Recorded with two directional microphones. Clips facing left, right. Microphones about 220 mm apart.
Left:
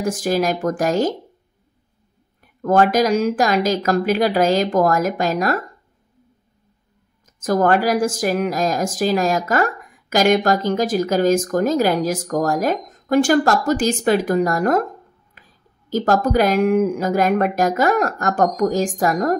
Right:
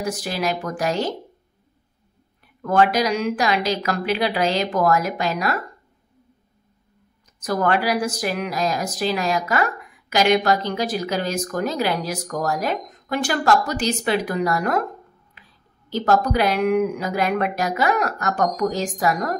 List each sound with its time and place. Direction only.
0.0 s a woman's voice: 45° left (ahead or behind)
2.4 s a woman's voice: 45° left (ahead or behind)
7.3 s a woman's voice: 45° left (ahead or behind)